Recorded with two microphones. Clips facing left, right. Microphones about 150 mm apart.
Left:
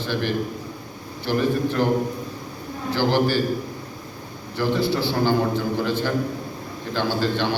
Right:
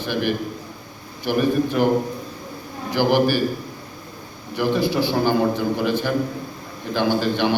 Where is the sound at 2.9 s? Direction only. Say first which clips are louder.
Right 2 dB; 15° right (ahead or behind).